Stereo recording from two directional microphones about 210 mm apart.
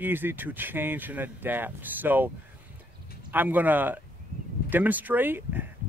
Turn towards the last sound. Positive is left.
turn(degrees=-10)  # may be behind; listen again after turning